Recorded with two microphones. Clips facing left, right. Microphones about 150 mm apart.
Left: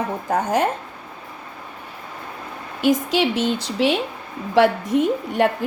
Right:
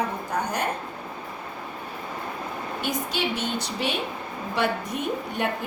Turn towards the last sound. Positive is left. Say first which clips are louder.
# left 8 dB
turn(degrees=90)